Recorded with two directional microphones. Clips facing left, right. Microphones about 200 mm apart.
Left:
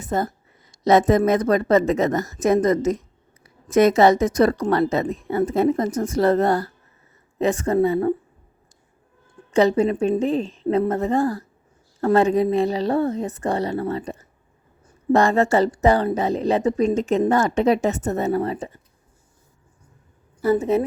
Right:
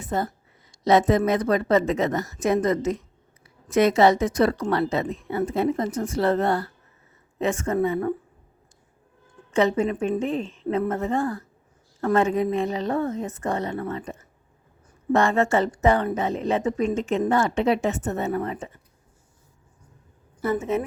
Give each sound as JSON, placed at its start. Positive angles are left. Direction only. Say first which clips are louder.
{"t": 0.0, "sound": "a woman's voice", "louder": "left 3 dB", "side_deg": 45}
{"t": 9.5, "sound": "a woman's voice", "louder": "left 4 dB", "side_deg": 35}
{"t": 20.4, "sound": "a woman's voice", "louder": "left 5 dB", "side_deg": 35}